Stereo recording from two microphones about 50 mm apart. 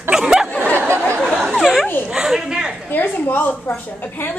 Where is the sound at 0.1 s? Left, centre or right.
Centre.